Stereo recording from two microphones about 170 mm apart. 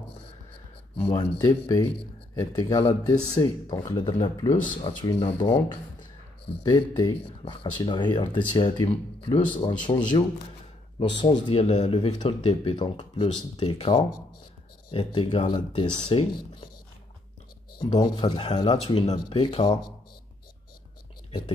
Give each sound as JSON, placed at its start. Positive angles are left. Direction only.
{"t": 0.9, "sound": "speech", "side_deg": 15}
{"t": 17.7, "sound": "speech", "side_deg": 25}